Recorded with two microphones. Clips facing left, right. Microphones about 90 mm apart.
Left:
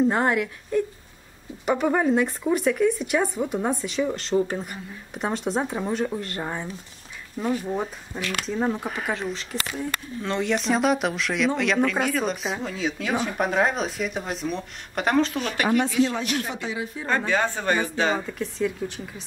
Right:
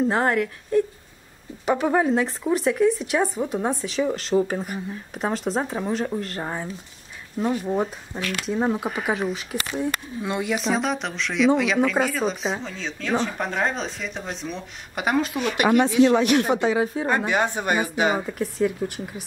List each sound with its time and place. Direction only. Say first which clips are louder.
0.0 s speech: even; centre (ahead or behind)
1.7 s speech: right 1 dB; 5° right (ahead or behind)
16.0 s speech: right 6 dB; 70° right (ahead or behind)
16.6 s a woman's voice: right 9 dB; 45° right (ahead or behind)
17.0 s speech: right 2 dB; 15° right (ahead or behind)